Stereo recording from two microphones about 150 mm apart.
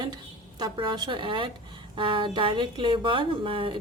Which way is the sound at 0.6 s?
30° right (ahead or behind).